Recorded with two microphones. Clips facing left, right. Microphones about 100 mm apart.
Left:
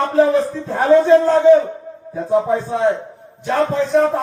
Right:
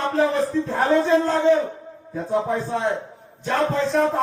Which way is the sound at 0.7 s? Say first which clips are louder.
Left 8 dB; 5° left (ahead or behind).